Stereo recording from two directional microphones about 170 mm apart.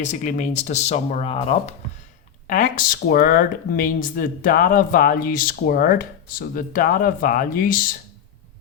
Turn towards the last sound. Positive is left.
turn(degrees=55)  # may be behind; listen again after turning